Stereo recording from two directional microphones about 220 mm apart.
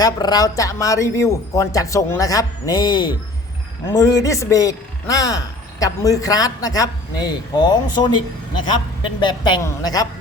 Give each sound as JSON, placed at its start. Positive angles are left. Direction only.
{"t": 0.0, "sound": "speech", "side_deg": 15}
{"t": 9.2, "sound": "a man's voice", "side_deg": 20}